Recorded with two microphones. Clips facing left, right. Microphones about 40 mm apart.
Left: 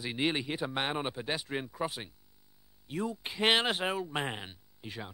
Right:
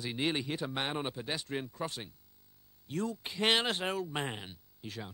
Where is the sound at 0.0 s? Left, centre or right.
Centre.